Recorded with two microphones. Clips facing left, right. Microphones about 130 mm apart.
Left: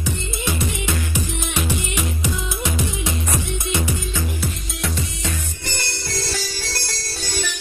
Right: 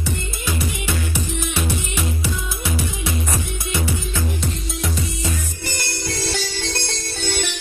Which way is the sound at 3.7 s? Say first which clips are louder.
Right 1 dB; 20° left (ahead or behind).